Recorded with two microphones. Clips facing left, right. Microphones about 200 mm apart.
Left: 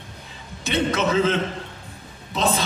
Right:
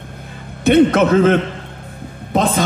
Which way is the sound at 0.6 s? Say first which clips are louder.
Right 12 dB; 55° right (ahead or behind).